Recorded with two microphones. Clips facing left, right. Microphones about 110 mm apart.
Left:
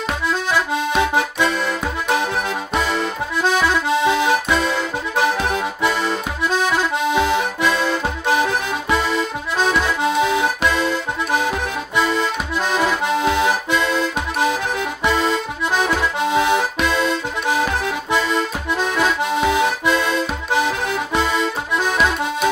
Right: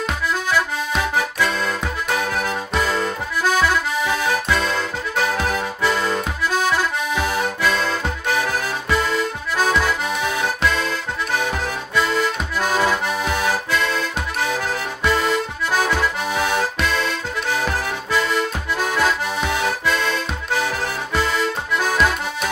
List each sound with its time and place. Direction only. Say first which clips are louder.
2.0 s music: left 2 dB; 25° left (ahead or behind)
2.9 s accordion: left 1 dB; 20° left (ahead or behind)
7.2 s accordion: left 3 dB; 20° left (ahead or behind)
18.9 s accordion: left 3 dB; 20° left (ahead or behind)